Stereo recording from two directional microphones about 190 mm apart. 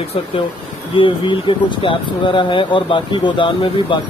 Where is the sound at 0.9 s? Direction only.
25° left (ahead or behind).